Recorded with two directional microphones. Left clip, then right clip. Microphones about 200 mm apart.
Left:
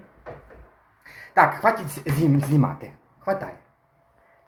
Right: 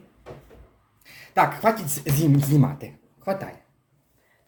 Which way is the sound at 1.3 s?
50° right (ahead or behind).